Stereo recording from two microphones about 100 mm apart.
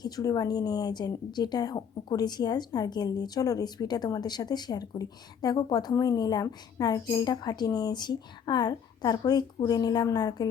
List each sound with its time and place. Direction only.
0.0 s a woman's voice: 40° left (ahead or behind)